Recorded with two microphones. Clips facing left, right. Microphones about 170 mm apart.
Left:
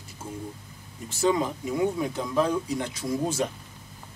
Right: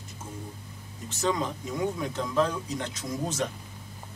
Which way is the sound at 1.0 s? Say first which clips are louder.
Left 4 dB; 10° left (ahead or behind).